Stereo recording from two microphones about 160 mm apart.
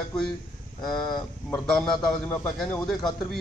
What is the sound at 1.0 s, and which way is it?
Speech, 25° left (ahead or behind).